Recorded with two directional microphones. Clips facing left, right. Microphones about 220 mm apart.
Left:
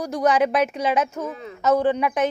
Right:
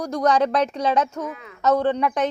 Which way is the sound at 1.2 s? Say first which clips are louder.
Left 2 dB; 30° left (ahead or behind).